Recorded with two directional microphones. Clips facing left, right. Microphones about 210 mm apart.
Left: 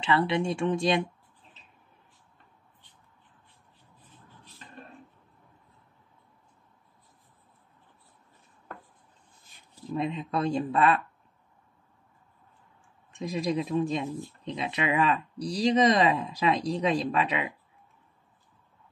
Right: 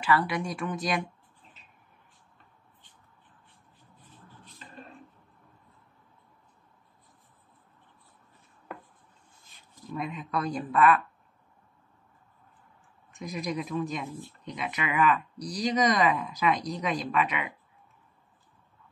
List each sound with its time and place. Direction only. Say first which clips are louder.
0.0 s speech: left 2 dB; 25° left (ahead or behind)
9.8 s speech: left 5 dB; 25° left (ahead or behind)
13.1 s speech: left 4 dB; 30° left (ahead or behind)